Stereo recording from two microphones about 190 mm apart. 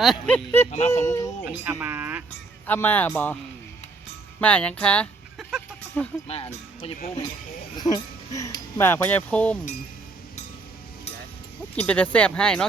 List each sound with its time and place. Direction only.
0.0 s speech: centre (ahead or behind)
0.7 s speech: 35° left (ahead or behind)
1.0 s speech: 15° left (ahead or behind)
1.5 s speech: 10° right (ahead or behind)
2.6 s speech: 10° left (ahead or behind)
4.4 s a sound: 5° left (ahead or behind)
6.2 s speech: 30° left (ahead or behind)
7.8 s speech: 20° left (ahead or behind)
11.8 s speech: 10° left (ahead or behind)